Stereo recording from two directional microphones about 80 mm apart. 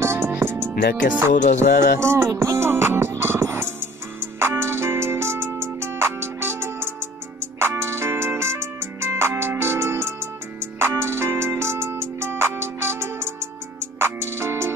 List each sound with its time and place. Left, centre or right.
0.0 s music: right